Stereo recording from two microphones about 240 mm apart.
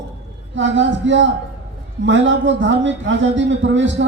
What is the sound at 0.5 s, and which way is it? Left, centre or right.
A man's voice, right.